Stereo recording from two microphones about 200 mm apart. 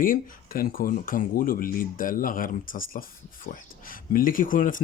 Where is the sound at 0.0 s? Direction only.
45° left (ahead or behind).